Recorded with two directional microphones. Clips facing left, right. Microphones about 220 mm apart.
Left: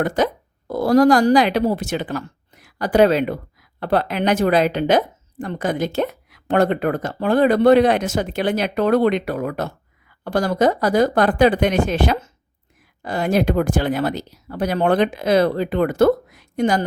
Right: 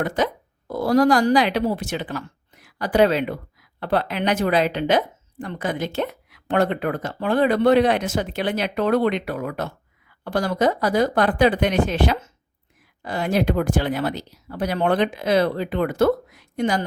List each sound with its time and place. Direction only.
0.0 s speech: 45° left (ahead or behind)